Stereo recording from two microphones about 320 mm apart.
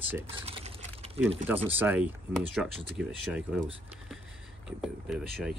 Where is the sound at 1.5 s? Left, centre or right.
Centre.